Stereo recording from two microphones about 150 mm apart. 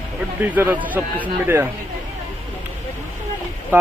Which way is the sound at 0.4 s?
10° right (ahead or behind).